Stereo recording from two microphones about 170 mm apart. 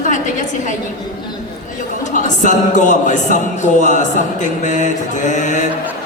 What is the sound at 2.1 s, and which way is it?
A man's voice, 45° left (ahead or behind).